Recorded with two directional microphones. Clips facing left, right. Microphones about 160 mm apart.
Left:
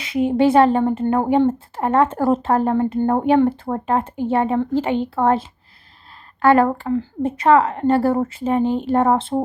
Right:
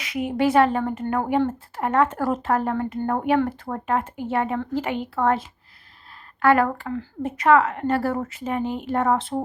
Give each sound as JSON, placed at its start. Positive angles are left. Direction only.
{"t": 0.0, "sound": "speech", "side_deg": 30}